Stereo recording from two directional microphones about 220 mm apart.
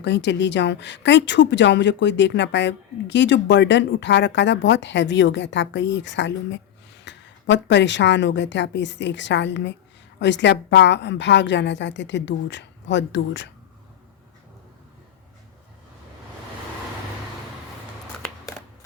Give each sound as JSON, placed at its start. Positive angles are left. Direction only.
{"t": 0.0, "sound": "a woman's voice", "side_deg": 50}